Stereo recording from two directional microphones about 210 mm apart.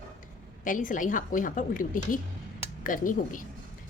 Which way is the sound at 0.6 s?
40° left (ahead or behind).